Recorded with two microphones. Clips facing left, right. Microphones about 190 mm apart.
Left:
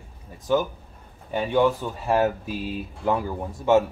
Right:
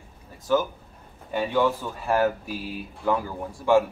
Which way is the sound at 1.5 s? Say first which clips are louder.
Left 3 dB; 15° left (ahead or behind).